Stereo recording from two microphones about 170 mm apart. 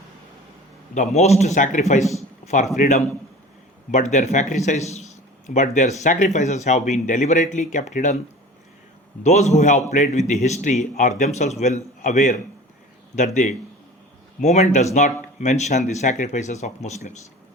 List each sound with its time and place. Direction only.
0.9 s speech: 40° left (ahead or behind)
2.4 s a sound: 50° left (ahead or behind)
2.7 s speech: 45° left (ahead or behind)
9.2 s speech: 40° left (ahead or behind)